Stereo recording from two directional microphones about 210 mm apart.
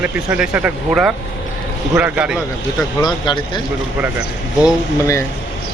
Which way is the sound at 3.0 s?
20° left (ahead or behind).